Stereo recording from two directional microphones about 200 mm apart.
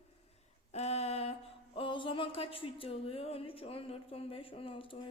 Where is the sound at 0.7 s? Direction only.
35° left (ahead or behind).